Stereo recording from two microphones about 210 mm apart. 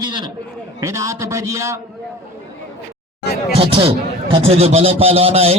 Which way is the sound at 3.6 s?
25° right (ahead or behind).